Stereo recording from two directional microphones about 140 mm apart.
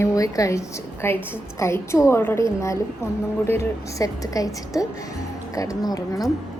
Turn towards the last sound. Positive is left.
turn(degrees=25)  # may be behind; listen again after turning